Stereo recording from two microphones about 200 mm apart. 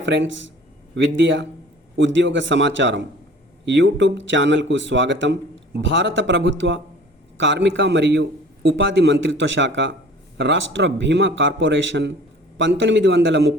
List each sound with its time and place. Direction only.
0.0 s speech: 65° right (ahead or behind)